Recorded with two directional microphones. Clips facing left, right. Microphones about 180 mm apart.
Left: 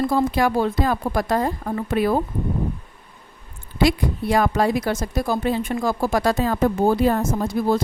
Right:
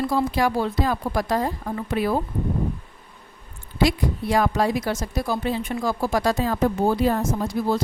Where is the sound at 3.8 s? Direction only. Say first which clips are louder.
Left 2 dB; 60° left (ahead or behind).